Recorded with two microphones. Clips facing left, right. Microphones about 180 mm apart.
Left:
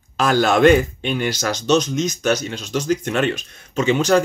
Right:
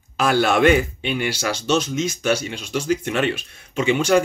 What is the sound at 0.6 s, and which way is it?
Speech, 40° left (ahead or behind).